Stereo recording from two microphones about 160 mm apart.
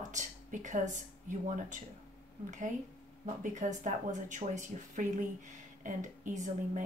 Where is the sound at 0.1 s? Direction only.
50° right (ahead or behind).